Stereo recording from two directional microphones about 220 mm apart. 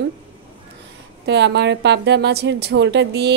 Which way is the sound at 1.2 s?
50° right (ahead or behind).